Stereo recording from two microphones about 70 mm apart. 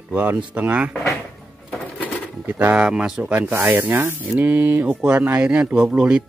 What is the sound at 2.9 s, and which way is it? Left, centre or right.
Speech, centre.